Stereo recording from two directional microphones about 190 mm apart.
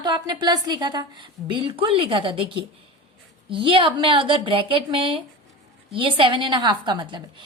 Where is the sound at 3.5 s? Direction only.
25° right (ahead or behind).